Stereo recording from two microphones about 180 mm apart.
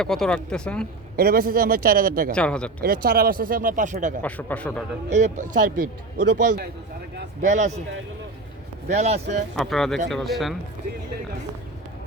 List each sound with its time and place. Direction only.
0.0 s speech: 5° left (ahead or behind)
1.1 s a man's voice: 55° right (ahead or behind)
2.3 s speech: 5° left (ahead or behind)
2.8 s speech: 55° right (ahead or behind)
4.2 s speech: 10° left (ahead or behind)
5.0 s speech: 40° right (ahead or behind)
8.9 s speech: 40° right (ahead or behind)
9.6 s speech: centre (ahead or behind)